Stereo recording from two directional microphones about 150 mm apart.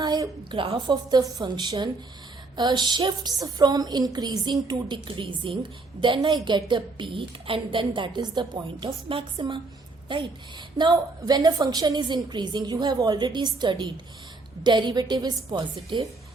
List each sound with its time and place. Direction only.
0.0 s a woman's voice: 30° right (ahead or behind)